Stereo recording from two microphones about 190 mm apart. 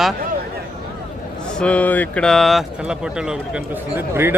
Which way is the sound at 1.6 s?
5° left (ahead or behind).